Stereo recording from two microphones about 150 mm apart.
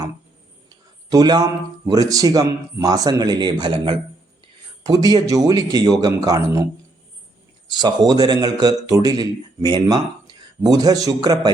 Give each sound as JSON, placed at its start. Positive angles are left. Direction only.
{"t": 1.1, "sound": "a man's voice", "side_deg": -25}
{"t": 7.7, "sound": "a man's voice", "side_deg": -30}